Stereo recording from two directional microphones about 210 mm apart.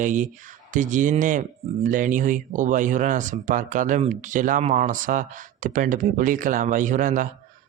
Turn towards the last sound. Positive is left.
turn(degrees=-40)  # may be behind; listen again after turning